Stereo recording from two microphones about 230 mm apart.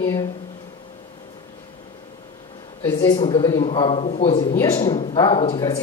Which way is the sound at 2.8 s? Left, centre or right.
Centre.